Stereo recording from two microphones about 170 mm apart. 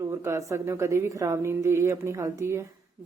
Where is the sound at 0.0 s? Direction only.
15° right (ahead or behind).